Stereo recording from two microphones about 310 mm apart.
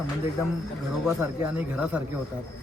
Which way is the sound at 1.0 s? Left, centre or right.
Centre.